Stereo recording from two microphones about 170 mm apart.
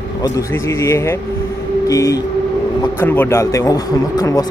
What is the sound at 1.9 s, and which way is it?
Vehicle, 20° left (ahead or behind).